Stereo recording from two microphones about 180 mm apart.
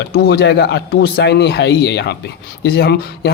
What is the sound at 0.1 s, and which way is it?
A man's voice, 60° left (ahead or behind).